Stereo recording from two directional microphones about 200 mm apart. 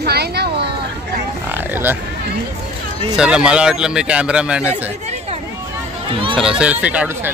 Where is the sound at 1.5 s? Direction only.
10° right (ahead or behind).